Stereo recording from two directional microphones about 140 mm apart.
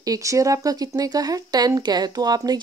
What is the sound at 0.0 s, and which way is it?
Speech, 25° right (ahead or behind).